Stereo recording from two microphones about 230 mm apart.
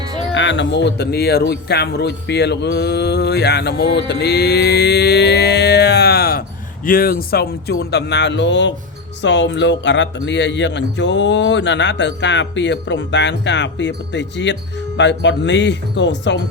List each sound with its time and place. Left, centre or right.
0.3 s a man's voice: left